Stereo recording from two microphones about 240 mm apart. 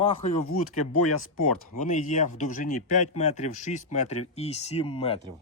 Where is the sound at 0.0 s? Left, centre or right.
Left.